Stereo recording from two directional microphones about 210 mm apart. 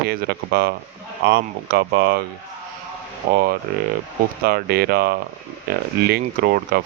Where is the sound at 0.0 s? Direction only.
45° right (ahead or behind).